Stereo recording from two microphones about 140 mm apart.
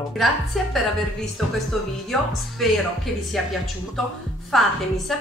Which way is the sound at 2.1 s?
Centre (ahead or behind).